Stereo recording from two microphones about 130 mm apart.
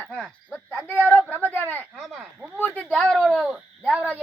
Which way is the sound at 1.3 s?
15° right (ahead or behind).